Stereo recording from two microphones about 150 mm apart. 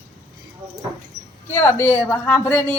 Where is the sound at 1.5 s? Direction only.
15° left (ahead or behind).